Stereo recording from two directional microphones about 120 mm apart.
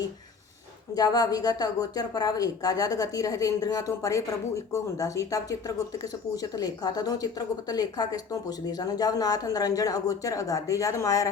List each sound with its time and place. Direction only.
0.9 s a woman's voice: 35° left (ahead or behind)